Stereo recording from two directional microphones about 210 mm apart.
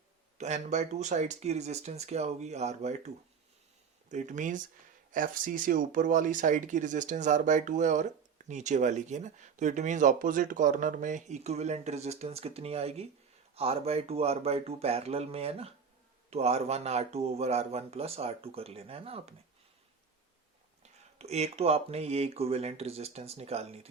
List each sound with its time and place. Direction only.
0.3 s speech: 35° right (ahead or behind)
4.1 s speech: 35° right (ahead or behind)
20.8 s speech: 30° right (ahead or behind)